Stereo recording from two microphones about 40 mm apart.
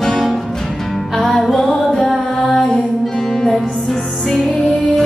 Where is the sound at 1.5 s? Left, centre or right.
Centre.